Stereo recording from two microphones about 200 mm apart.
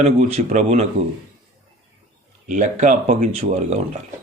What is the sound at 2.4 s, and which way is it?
Speech, 35° right (ahead or behind).